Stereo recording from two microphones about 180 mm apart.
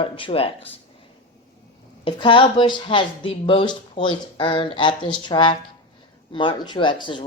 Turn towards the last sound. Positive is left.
turn(degrees=25)  # may be behind; listen again after turning